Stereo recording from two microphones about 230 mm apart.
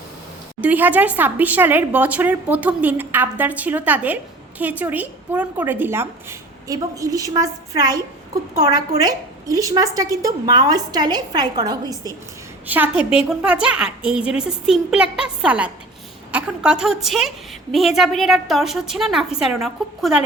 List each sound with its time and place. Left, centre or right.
0.6 s a woman's voice: centre